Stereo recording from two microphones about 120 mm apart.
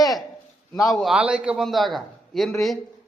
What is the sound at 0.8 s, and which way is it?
A man's voice, centre (ahead or behind).